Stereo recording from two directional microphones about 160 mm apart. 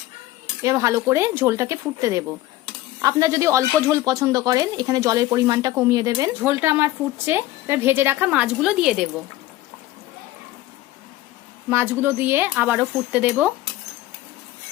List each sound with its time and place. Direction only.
0.6 s speech: 20° right (ahead or behind)
11.7 s speech: 15° right (ahead or behind)